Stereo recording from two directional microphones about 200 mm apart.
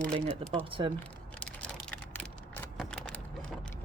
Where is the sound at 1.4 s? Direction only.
5° left (ahead or behind).